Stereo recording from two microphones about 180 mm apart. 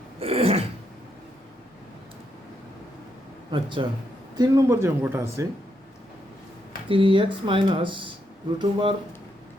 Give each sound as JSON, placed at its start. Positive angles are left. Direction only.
{"t": 0.2, "sound": "throat clearing", "side_deg": -35}
{"t": 3.5, "sound": "speech", "side_deg": -25}
{"t": 6.8, "sound": "speech", "side_deg": -30}